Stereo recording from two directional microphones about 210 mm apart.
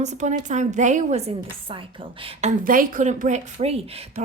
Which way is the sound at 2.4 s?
40° right (ahead or behind).